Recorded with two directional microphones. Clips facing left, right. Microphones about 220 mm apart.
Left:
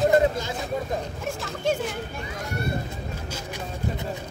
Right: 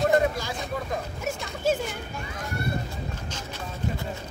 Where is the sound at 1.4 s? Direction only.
Centre (ahead or behind).